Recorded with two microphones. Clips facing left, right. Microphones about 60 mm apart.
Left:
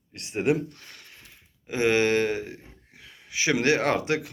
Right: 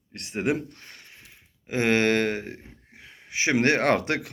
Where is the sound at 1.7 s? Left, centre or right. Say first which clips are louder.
Even; right.